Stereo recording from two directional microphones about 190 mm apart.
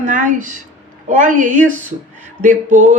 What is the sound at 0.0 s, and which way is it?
A woman's voice, 40° right (ahead or behind).